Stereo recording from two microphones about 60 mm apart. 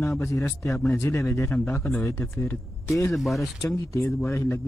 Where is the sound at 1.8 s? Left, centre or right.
Centre.